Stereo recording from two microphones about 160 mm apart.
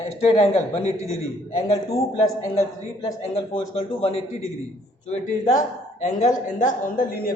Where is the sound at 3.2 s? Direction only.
40° left (ahead or behind).